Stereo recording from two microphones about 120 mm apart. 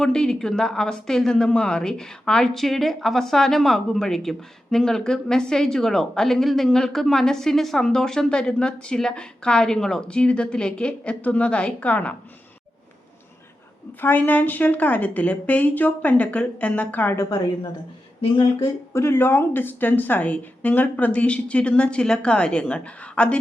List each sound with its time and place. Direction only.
0.0 s a woman's voice: 5° left (ahead or behind)
14.0 s a woman's voice: 15° left (ahead or behind)
17.2 s a woman's voice: 35° left (ahead or behind); by 23.4 s 10° left (ahead or behind)